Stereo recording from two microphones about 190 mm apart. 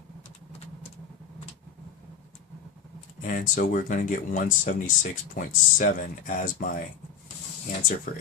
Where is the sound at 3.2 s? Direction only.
45° left (ahead or behind).